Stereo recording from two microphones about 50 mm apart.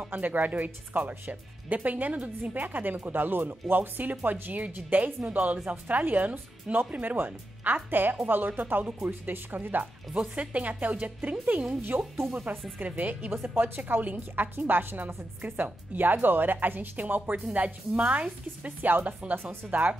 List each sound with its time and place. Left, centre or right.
0.1 s speech: right
10.3 s a woman's voice: right
18.8 s speech: right